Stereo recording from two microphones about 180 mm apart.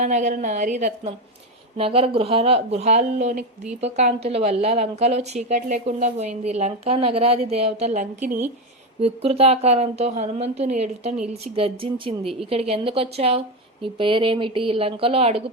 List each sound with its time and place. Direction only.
0.0 s a woman's voice: 40° right (ahead or behind)